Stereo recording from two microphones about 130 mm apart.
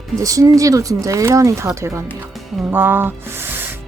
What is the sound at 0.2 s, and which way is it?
Speech, 25° right (ahead or behind).